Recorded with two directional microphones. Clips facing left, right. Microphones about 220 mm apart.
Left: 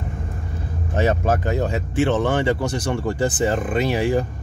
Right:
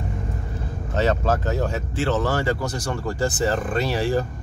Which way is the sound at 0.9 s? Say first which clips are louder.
Left 1 dB; 15° left (ahead or behind).